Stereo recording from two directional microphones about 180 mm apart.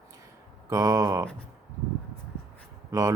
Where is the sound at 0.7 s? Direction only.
15° right (ahead or behind).